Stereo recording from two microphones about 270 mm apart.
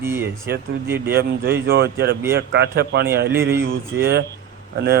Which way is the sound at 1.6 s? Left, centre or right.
Right.